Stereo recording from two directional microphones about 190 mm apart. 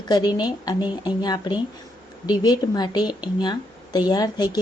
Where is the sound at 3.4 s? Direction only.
20° left (ahead or behind).